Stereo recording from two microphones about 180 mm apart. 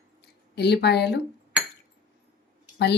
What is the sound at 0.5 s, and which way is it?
Speech, 65° left (ahead or behind).